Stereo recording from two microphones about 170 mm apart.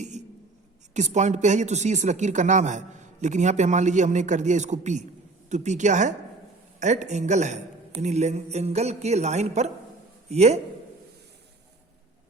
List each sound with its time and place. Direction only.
0.9 s a man's voice: 45° right (ahead or behind)